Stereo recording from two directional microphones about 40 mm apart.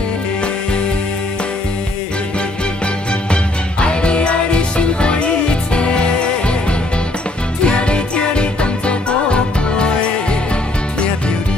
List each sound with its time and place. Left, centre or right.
3.8 s music: left
7.6 s music: left